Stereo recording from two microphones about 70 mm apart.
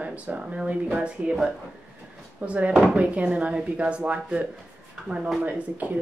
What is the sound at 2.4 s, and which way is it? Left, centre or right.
Speech, right.